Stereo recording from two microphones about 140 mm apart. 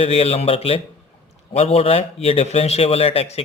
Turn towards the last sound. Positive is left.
turn(degrees=45)  # may be behind; listen again after turning